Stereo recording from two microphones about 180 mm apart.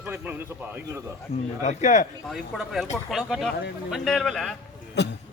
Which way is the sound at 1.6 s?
45° left (ahead or behind).